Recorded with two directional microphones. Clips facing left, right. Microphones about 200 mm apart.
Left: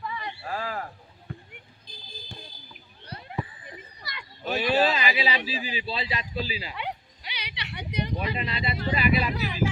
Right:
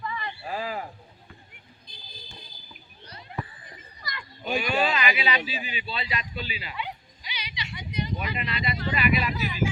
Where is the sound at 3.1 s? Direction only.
55° left (ahead or behind).